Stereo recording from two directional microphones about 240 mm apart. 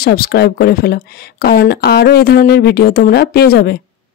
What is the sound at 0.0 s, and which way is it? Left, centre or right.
Speech, left.